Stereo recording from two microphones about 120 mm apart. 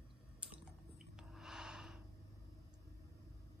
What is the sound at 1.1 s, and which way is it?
Gasp, 5° right (ahead or behind).